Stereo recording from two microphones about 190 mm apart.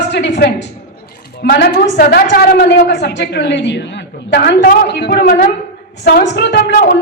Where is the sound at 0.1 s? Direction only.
65° left (ahead or behind).